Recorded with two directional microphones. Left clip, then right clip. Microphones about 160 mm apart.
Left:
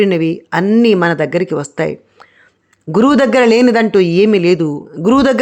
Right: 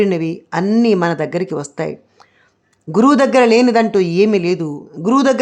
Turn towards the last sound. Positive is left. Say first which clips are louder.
# left 2 dB
turn(degrees=20)  # may be behind; listen again after turning